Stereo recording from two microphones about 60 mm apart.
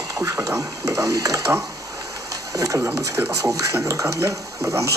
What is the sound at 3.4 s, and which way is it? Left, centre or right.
Speech, right.